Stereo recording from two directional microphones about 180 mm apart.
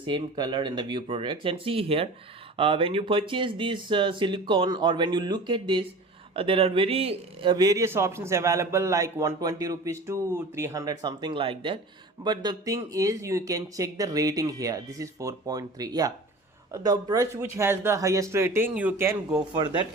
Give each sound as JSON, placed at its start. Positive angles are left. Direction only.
{"t": 0.0, "sound": "speech", "side_deg": -25}
{"t": 7.5, "sound": "a man's voice", "side_deg": -20}
{"t": 19.5, "sound": "speech", "side_deg": -25}